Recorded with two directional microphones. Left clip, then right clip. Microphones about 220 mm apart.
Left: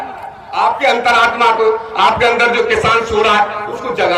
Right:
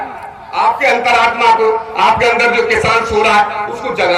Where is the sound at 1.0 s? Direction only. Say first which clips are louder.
Left 1 dB; 15° left (ahead or behind).